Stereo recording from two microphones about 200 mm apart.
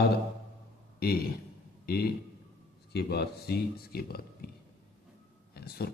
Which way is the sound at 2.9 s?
55° left (ahead or behind).